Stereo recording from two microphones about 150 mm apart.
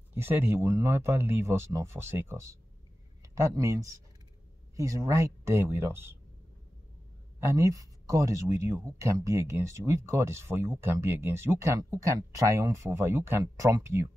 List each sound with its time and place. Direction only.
0.1 s speech: 15° right (ahead or behind)
7.3 s speech: 20° right (ahead or behind)